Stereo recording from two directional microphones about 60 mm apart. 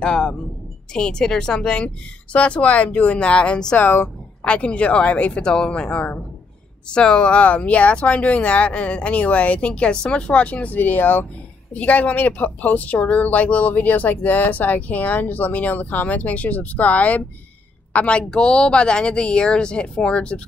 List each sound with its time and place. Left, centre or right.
0.0 s a woman's voice: centre
3.7 s speech: left
4.5 s a woman's voice: centre